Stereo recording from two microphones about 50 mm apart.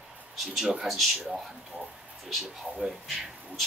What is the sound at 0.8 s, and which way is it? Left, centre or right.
Speech, centre.